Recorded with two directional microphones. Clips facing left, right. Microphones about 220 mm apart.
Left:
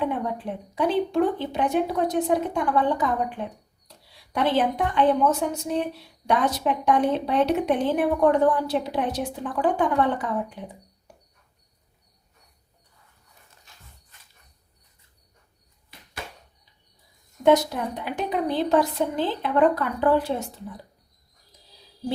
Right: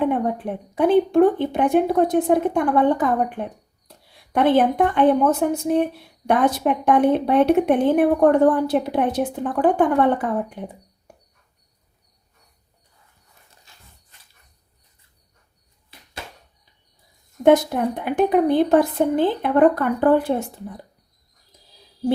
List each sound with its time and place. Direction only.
0.0 s a woman's voice: 55° right (ahead or behind)
17.4 s a woman's voice: 55° right (ahead or behind)